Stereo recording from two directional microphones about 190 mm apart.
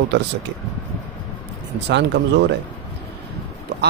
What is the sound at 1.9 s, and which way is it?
Speech, 65° right (ahead or behind).